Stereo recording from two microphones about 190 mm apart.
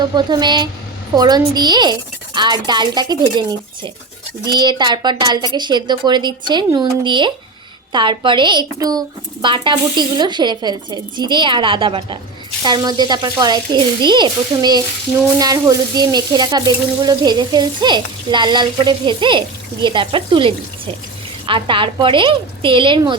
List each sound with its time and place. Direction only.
0.1 s frying: 20° right (ahead or behind)
4.4 s frying: 25° right (ahead or behind)